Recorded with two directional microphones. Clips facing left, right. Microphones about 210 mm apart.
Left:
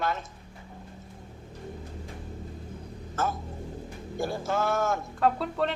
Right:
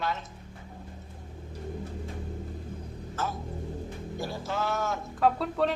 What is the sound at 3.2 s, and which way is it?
A woman's voice, 50° left (ahead or behind).